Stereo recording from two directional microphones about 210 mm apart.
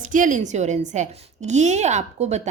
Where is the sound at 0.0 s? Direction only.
40° right (ahead or behind).